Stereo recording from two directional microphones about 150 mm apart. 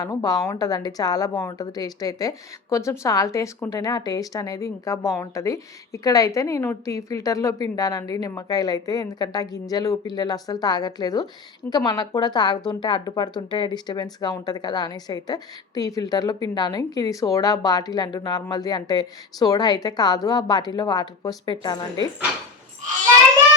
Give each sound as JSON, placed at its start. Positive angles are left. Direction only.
{"t": 0.0, "sound": "speech", "side_deg": 25}